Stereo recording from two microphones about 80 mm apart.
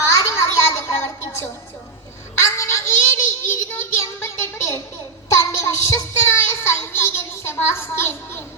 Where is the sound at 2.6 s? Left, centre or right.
Left.